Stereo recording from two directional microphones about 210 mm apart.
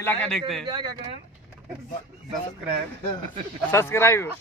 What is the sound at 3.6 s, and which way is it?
Speech, 10° left (ahead or behind).